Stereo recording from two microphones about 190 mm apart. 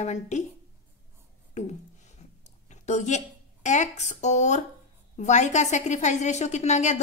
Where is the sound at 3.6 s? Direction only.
40° left (ahead or behind).